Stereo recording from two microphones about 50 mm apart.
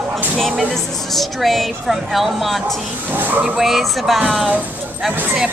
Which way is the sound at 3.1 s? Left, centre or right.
Right.